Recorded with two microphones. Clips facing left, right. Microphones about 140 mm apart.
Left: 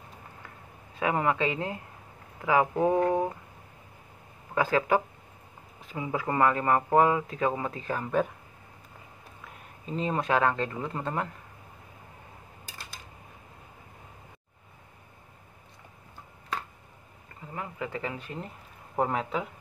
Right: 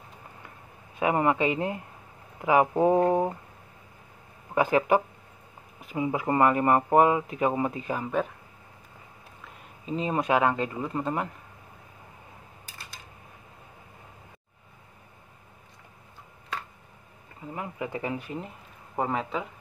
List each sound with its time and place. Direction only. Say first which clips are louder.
0.9 s speech: right 3 dB; 20° right (ahead or behind)
4.6 s speech: right 3 dB; 20° right (ahead or behind)
10.0 s speech: right 2 dB; 15° right (ahead or behind)
17.6 s speech: right 1 dB; 15° right (ahead or behind)
18.9 s speech: left 1 dB; centre (ahead or behind)